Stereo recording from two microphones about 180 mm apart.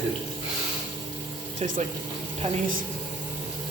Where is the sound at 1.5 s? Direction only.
45° right (ahead or behind).